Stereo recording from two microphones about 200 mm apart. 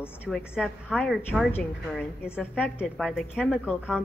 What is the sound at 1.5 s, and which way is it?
A woman's voice, 10° left (ahead or behind).